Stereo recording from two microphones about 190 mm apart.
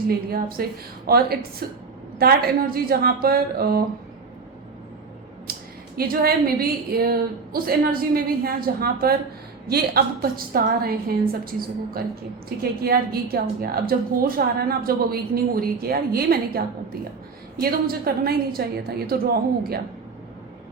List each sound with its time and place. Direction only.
0.1 s a woman's voice: 55° right (ahead or behind)
5.5 s a sound: 55° right (ahead or behind)
6.0 s a woman's voice: 50° right (ahead or behind)
12.5 s a woman's voice: 55° right (ahead or behind)